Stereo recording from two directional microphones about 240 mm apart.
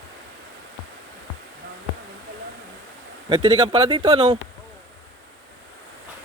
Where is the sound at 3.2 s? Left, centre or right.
Centre.